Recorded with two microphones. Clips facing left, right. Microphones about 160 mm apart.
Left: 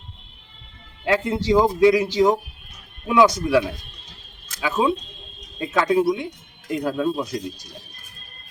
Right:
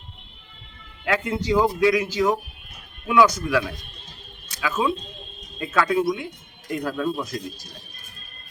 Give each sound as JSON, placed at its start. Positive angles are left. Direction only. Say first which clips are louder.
{"t": 1.0, "sound": "speech", "louder": "left 3 dB", "side_deg": 30}